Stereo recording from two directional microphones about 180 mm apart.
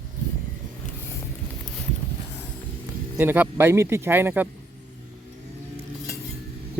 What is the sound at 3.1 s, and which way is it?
Speech, 10° right (ahead or behind).